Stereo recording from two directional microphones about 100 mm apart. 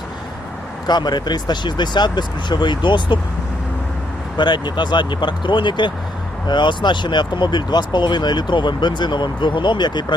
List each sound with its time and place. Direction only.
0.9 s speech: 45° left (ahead or behind)
4.4 s speech: 50° left (ahead or behind)